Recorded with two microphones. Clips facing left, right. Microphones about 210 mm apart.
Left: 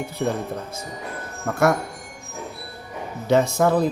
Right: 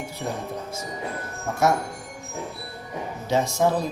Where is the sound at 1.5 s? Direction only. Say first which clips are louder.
Left 4 dB; 60° left (ahead or behind).